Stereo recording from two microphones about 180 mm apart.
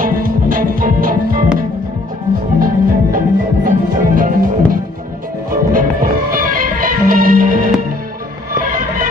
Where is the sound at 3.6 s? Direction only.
50° right (ahead or behind).